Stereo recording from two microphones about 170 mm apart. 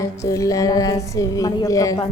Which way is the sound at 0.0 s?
20° left (ahead or behind).